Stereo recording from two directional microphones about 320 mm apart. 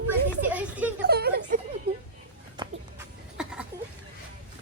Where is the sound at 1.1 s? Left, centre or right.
Right.